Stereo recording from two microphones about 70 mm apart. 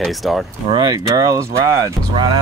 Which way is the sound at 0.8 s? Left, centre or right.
Right.